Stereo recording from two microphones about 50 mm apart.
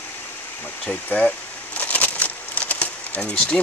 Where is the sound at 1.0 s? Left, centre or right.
Left.